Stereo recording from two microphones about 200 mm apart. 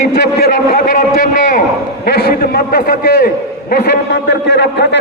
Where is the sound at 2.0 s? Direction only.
55° left (ahead or behind).